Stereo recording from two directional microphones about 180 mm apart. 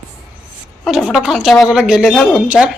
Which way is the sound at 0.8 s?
Centre (ahead or behind).